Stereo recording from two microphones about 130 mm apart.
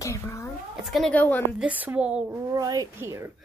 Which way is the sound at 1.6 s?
10° right (ahead or behind).